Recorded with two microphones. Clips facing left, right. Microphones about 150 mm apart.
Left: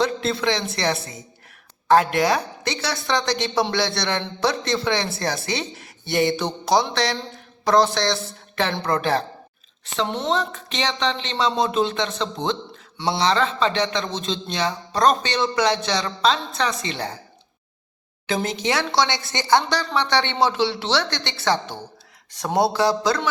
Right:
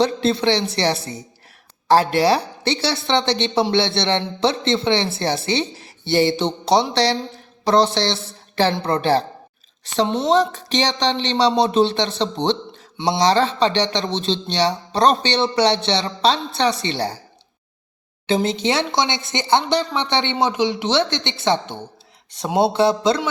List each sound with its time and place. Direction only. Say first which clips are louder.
0.0 s a woman's voice: right 4 dB; 30° right (ahead or behind)
18.4 s speech: right 3 dB; 25° right (ahead or behind)